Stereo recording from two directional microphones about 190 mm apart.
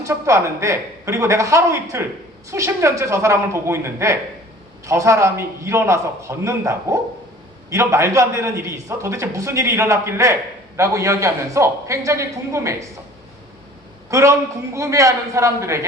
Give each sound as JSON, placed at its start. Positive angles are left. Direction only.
{"t": 0.0, "sound": "a man's voice", "side_deg": -15}
{"t": 14.1, "sound": "a man's voice", "side_deg": -15}